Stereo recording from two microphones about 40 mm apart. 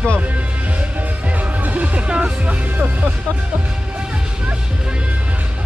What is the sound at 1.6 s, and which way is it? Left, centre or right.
Music, right.